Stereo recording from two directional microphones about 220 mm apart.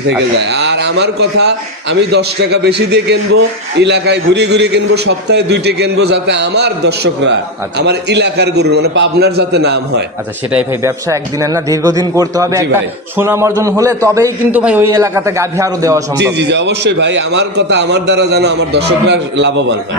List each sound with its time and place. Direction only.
0.4 s a man's voice: 50° right (ahead or behind)
10.5 s a man's voice: 15° right (ahead or behind)
16.2 s a man's voice: 50° right (ahead or behind)